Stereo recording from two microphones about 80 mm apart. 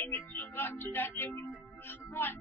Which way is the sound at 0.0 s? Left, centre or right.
Left.